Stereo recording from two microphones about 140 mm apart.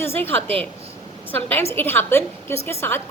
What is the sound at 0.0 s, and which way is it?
A woman's voice, 15° left (ahead or behind).